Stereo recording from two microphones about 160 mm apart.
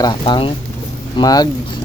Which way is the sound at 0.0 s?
30° left (ahead or behind).